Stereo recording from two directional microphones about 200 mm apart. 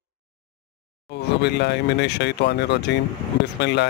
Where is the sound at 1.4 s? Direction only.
60° left (ahead or behind).